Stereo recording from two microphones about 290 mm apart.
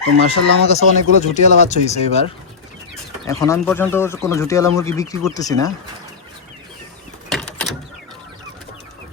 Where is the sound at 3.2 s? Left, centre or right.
Centre.